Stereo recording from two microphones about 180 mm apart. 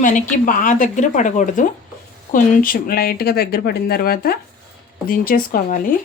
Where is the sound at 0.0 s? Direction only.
45° left (ahead or behind).